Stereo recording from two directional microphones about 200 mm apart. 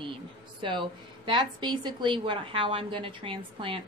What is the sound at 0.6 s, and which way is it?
A woman's voice, 25° right (ahead or behind).